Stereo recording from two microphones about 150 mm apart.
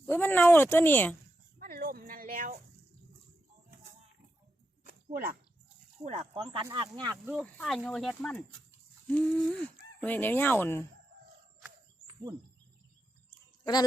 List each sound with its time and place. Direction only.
0.0 s fowl: 15° left (ahead or behind)
1.5 s a sound: 75° right (ahead or behind)
4.8 s a sound: 65° right (ahead or behind)
6.0 s speech: 45° right (ahead or behind)
7.4 s speech: centre (ahead or behind)
9.0 s fowl: 10° left (ahead or behind)